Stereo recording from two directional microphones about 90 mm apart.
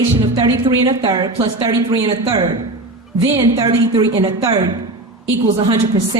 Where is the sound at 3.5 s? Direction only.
45° right (ahead or behind).